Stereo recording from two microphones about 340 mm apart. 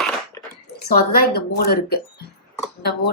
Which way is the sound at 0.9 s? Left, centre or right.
Left.